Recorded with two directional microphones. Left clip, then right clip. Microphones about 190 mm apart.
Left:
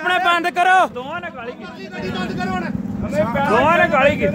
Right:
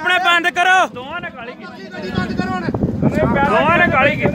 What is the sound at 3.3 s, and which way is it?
Speech, 55° left (ahead or behind).